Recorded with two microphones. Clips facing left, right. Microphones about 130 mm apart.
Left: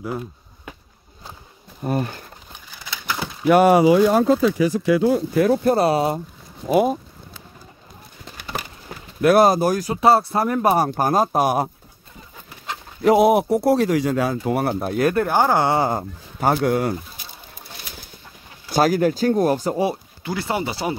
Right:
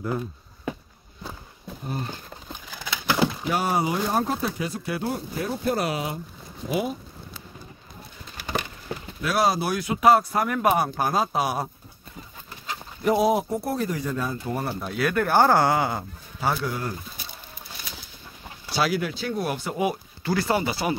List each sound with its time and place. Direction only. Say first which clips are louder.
3.4 s speech: left 11 dB; 65° left (ahead or behind); by 5.6 s 90° left
5.8 s speech: left 9 dB; 35° left (ahead or behind)
6.7 s speech: left 9 dB; 55° left (ahead or behind)
9.2 s speech: left 9 dB; 55° left (ahead or behind)
12.6 s speech: left 6 dB; 70° left (ahead or behind)
14.9 s speech: left 4 dB; 40° left (ahead or behind)
15.2 s speech: left 1 dB; 20° left (ahead or behind)
15.8 s speech: left 5 dB; 40° left (ahead or behind); by 16.9 s 65° left (ahead or behind)
18.7 s speech: left 8 dB; 45° left (ahead or behind)
20.2 s speech: right 1 dB; 20° left (ahead or behind)